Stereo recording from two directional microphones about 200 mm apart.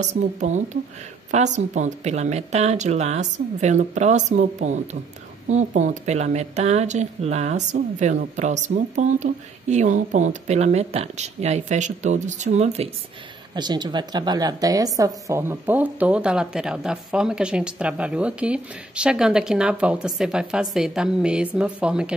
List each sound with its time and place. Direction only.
0.0 s speech: 35° right (ahead or behind)
13.6 s speech: 20° right (ahead or behind); by 22.1 s 5° right (ahead or behind)